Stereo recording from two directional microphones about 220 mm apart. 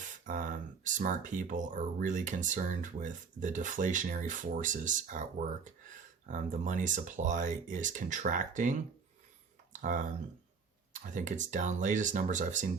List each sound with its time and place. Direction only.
0.3 s speech: 35° right (ahead or behind)
9.7 s a sound: 35° right (ahead or behind)
10.9 s speech: 35° right (ahead or behind)